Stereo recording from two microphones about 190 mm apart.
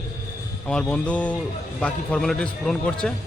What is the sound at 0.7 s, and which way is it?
A man's voice, 5° left (ahead or behind).